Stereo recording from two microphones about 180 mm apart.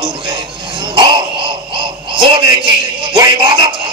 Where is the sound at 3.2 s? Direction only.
25° right (ahead or behind).